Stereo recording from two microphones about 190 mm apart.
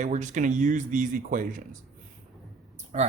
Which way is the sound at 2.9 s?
35° right (ahead or behind).